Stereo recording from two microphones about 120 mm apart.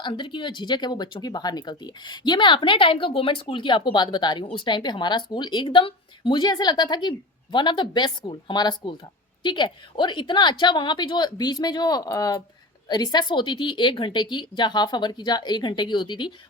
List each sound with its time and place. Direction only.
0.0 s speech: 40° left (ahead or behind)